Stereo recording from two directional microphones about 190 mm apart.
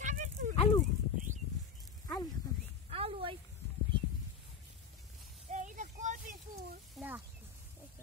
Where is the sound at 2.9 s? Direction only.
30° right (ahead or behind).